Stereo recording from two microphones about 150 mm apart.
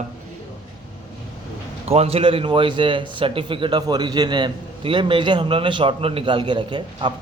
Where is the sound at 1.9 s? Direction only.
40° right (ahead or behind).